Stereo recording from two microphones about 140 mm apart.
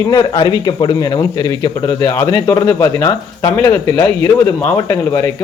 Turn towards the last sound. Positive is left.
turn(degrees=25)  # may be behind; listen again after turning